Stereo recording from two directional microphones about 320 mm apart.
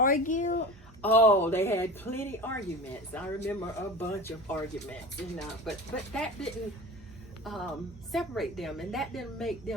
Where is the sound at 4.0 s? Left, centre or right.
Centre.